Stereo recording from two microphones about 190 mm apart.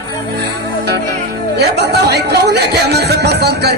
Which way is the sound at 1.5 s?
60° right (ahead or behind).